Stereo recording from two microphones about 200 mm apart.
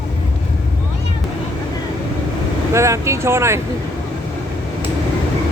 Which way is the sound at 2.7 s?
15° right (ahead or behind).